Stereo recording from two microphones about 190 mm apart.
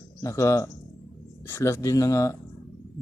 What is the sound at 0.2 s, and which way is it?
Speech, 15° left (ahead or behind).